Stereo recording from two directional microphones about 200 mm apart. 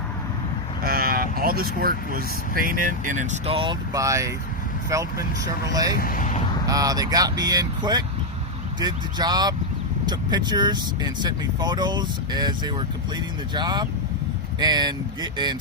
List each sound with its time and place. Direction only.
0.9 s speech: 45° right (ahead or behind); by 5.2 s 15° right (ahead or behind)
6.0 s speech: 45° left (ahead or behind)
6.7 s speech: 20° right (ahead or behind)